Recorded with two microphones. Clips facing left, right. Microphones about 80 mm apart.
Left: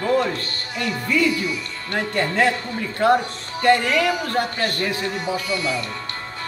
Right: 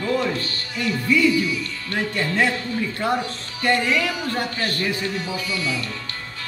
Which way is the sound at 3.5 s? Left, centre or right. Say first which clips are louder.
Left 3 dB; left.